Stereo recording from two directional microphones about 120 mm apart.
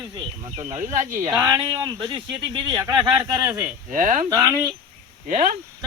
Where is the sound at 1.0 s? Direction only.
90° right.